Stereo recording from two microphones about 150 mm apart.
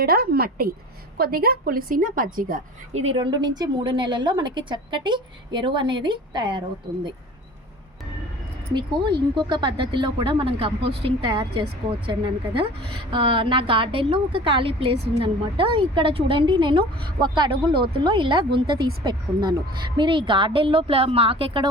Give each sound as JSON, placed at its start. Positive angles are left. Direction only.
{"t": 0.0, "sound": "a woman's voice", "side_deg": -90}
{"t": 2.9, "sound": "speech", "side_deg": -45}
{"t": 3.2, "sound": "a woman's voice", "side_deg": -30}
{"t": 8.7, "sound": "a woman's voice", "side_deg": -30}
{"t": 12.5, "sound": "a woman's voice", "side_deg": -35}